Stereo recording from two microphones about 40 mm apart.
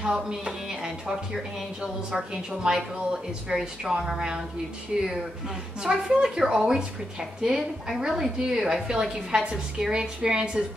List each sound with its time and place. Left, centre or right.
0.0 s a woman's voice: centre
8.5 s a woman's voice: centre